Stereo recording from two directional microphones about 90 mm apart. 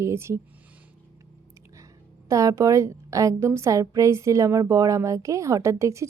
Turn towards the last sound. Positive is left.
turn(degrees=-35)  # may be behind; listen again after turning